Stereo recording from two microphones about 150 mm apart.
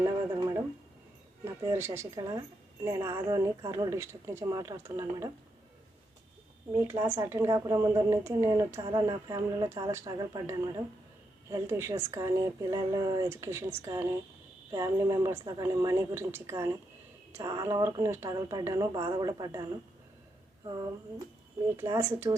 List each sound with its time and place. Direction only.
0.0 s radio: 25° right (ahead or behind)
1.5 s a woman's voice: 15° right (ahead or behind)
6.7 s a woman's voice: 15° right (ahead or behind)
22.3 s a woman's voice: 25° right (ahead or behind)